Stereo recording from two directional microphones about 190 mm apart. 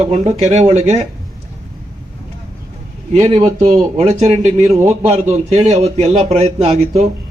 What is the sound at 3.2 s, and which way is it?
A man's voice, 35° right (ahead or behind).